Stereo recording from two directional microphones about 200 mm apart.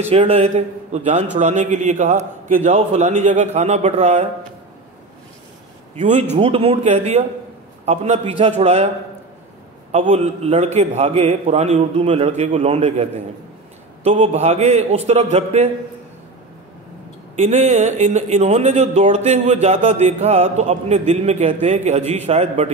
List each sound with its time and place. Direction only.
0.1 s speech: 30° right (ahead or behind)
5.9 s speech: 35° right (ahead or behind)
9.9 s speech: 30° right (ahead or behind)
17.4 s speech: 35° right (ahead or behind)